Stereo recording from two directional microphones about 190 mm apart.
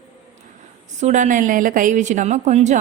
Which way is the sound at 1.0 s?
40° right (ahead or behind).